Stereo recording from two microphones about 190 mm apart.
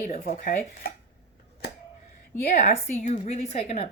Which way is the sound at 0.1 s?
45° left (ahead or behind).